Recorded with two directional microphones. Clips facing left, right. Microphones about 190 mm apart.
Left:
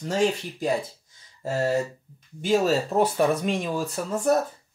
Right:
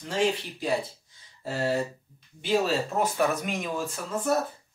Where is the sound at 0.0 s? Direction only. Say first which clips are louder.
Left 3 dB; 40° left (ahead or behind).